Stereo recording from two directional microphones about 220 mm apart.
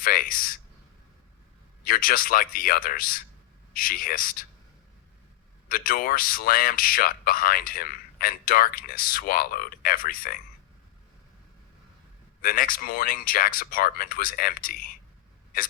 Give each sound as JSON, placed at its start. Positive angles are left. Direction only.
{"t": 0.0, "sound": "a man's voice", "side_deg": 40}
{"t": 1.8, "sound": "a man's voice", "side_deg": 40}
{"t": 5.6, "sound": "a man's voice", "side_deg": 40}
{"t": 12.4, "sound": "a man's voice", "side_deg": 40}